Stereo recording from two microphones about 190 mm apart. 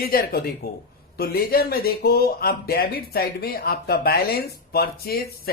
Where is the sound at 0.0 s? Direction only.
50° left (ahead or behind).